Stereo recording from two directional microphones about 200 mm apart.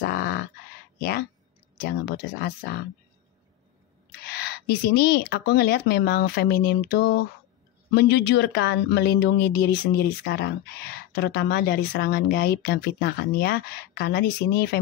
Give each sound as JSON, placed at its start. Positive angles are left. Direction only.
{"t": 0.0, "sound": "a sound", "side_deg": 45}
{"t": 1.9, "sound": "speech", "side_deg": 55}
{"t": 4.1, "sound": "speech", "side_deg": 55}